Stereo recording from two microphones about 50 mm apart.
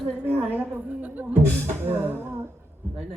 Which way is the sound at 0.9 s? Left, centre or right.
Right.